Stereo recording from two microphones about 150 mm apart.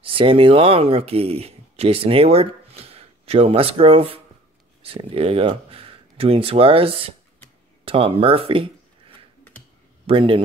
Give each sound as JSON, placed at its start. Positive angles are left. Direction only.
{"t": 0.0, "sound": "speech", "side_deg": -35}
{"t": 10.0, "sound": "speech", "side_deg": -35}